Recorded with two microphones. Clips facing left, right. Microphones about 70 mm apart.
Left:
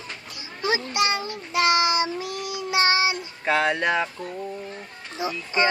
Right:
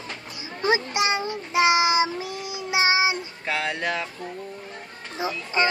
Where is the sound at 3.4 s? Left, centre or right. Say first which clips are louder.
Left 5 dB; centre.